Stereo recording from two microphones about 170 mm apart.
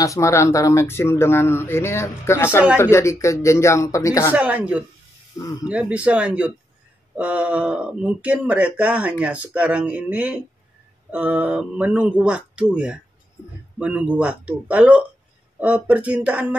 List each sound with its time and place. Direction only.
0.0 s speech: 20° left (ahead or behind)
4.3 s speech: 10° right (ahead or behind)
5.4 s speech: 25° left (ahead or behind)
5.7 s speech: 5° right (ahead or behind)